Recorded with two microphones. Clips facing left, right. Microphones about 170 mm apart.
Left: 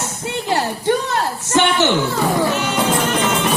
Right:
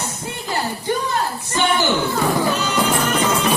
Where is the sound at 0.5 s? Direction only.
80° left.